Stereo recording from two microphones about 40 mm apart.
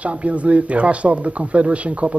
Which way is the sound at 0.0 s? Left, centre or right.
Right.